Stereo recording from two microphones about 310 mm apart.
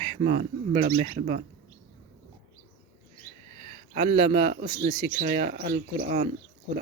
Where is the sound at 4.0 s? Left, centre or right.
Centre.